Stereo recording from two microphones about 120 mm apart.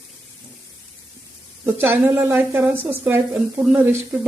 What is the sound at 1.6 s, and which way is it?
A woman's voice, 20° right (ahead or behind).